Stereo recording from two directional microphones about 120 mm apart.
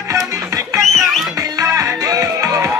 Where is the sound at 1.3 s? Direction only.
25° right (ahead or behind).